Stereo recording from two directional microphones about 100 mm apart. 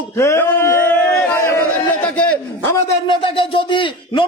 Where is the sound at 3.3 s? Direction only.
60° left (ahead or behind).